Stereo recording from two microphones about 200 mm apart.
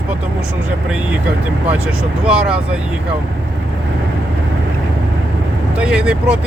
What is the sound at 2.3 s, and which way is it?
Speech, 5° right (ahead or behind).